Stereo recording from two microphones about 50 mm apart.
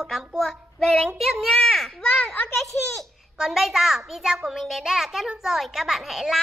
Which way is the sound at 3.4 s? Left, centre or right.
Centre.